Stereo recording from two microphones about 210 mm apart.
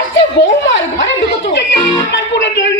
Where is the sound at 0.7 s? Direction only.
60° left (ahead or behind).